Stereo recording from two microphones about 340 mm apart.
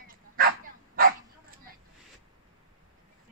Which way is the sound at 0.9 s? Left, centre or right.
Right.